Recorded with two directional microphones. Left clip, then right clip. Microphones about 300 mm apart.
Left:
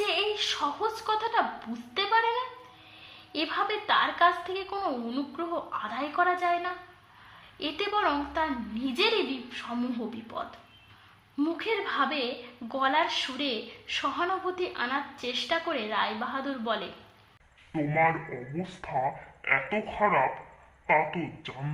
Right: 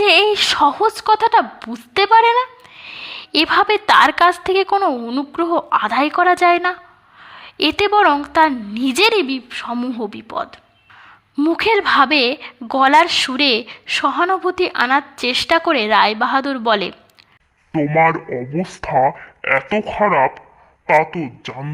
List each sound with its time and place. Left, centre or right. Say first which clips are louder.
0.0 s a woman's voice: right 15 dB; right
17.7 s speech: right 11 dB; right